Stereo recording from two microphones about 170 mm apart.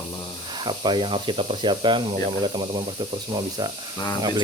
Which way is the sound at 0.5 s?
25° right (ahead or behind).